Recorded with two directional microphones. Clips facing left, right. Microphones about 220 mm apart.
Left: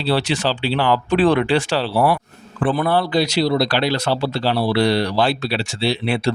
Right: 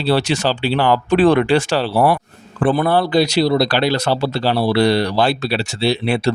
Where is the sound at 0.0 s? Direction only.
45° right (ahead or behind).